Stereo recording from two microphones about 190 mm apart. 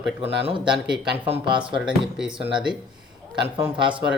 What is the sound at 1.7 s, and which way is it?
Speech, 5° right (ahead or behind).